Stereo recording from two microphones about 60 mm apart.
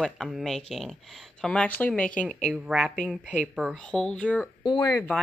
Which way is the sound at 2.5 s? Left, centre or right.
Centre.